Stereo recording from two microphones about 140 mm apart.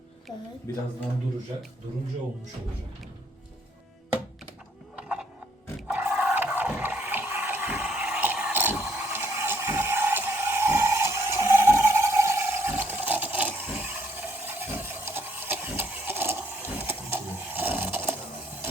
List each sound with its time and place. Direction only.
0.7 s speech: 20° left (ahead or behind)
4.9 s music: 10° right (ahead or behind)
5.9 s water: 10° right (ahead or behind)